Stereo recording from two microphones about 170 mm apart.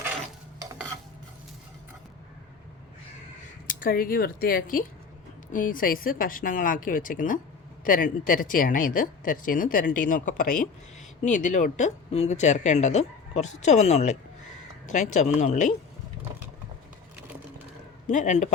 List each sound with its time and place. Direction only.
3.7 s speech: 55° left (ahead or behind)
18.1 s speech: 45° left (ahead or behind)